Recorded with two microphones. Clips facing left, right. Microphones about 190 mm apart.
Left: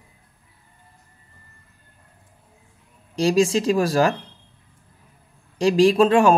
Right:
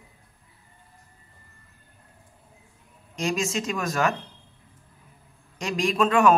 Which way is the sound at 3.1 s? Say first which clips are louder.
Left 9 dB; 35° left (ahead or behind).